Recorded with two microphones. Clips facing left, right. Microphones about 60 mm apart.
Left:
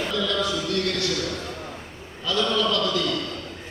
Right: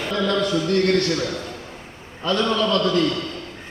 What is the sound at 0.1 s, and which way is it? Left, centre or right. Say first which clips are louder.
A man's voice: right 8 dB; right.